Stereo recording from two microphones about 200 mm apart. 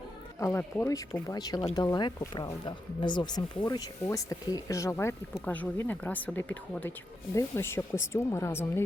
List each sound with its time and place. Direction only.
0.3 s speech: 15° left (ahead or behind)